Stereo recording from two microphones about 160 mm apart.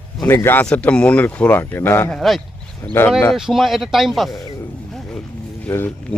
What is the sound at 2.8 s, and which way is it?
Speech, 15° left (ahead or behind).